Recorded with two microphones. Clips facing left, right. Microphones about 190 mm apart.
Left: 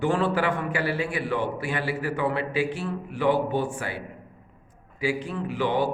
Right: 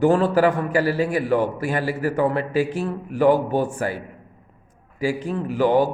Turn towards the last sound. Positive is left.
turn(degrees=-45)  # may be behind; listen again after turning